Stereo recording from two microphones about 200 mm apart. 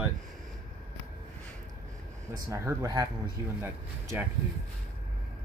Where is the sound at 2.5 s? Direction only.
15° right (ahead or behind).